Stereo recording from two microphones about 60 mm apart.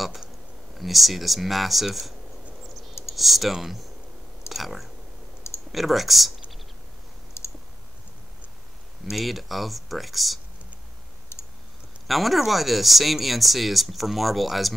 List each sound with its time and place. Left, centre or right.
0.7 s speech: centre
2.9 s clicking: left
3.2 s speech: centre
4.5 s a sound: centre
5.7 s speech: centre
7.4 s clicking: left
9.1 s speech: centre
12.1 s speech: centre